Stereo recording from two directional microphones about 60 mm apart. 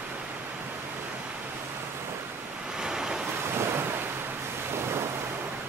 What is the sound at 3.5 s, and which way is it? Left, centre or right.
Waves, right.